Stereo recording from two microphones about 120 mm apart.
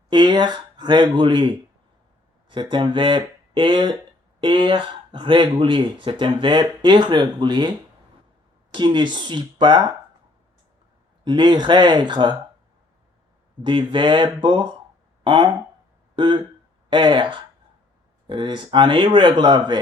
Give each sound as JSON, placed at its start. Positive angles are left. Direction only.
{"t": 0.1, "sound": "speech", "side_deg": -40}
{"t": 11.3, "sound": "speech", "side_deg": -40}
{"t": 13.7, "sound": "speech", "side_deg": -40}